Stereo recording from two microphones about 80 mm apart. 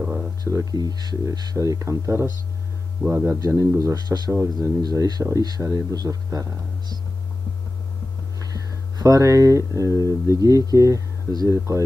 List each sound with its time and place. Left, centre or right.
0.4 s speech: right
4.8 s speech: right
8.4 s speech: right